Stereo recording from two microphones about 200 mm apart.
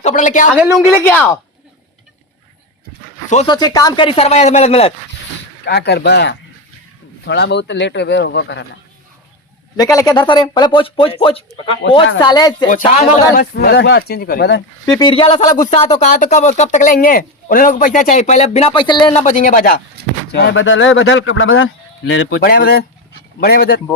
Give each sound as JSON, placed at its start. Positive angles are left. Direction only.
{"t": 0.0, "sound": "speech", "side_deg": 35}
{"t": 0.5, "sound": "a woman's voice", "side_deg": -5}
{"t": 1.0, "sound": "speech", "side_deg": 10}
{"t": 3.4, "sound": "speech", "side_deg": 20}
{"t": 5.6, "sound": "speech", "side_deg": 55}
{"t": 9.7, "sound": "speech", "side_deg": 20}
{"t": 12.7, "sound": "speech", "side_deg": 45}
{"t": 14.8, "sound": "speech", "side_deg": 20}
{"t": 19.2, "sound": "speech", "side_deg": 40}
{"t": 20.3, "sound": "a man's voice", "side_deg": 65}
{"t": 22.4, "sound": "speech", "side_deg": 50}